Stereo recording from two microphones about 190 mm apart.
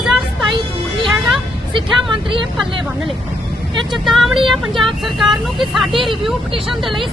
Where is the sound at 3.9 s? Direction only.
Centre (ahead or behind).